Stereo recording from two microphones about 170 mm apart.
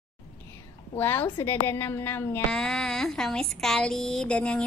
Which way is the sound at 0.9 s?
10° left (ahead or behind).